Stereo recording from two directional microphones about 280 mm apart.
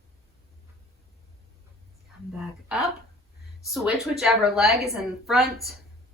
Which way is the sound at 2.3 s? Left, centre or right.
Centre.